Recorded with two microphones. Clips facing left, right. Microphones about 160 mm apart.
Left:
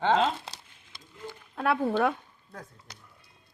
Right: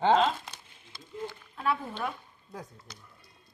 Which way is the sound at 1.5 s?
65° left (ahead or behind).